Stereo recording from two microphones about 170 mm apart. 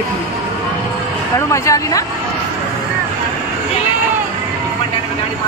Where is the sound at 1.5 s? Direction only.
20° left (ahead or behind).